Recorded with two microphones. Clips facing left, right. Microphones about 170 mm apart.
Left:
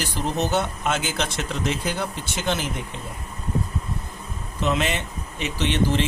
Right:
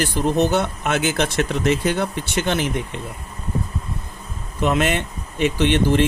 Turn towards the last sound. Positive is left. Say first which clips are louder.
# right 5 dB
turn(degrees=-55)  # may be behind; listen again after turning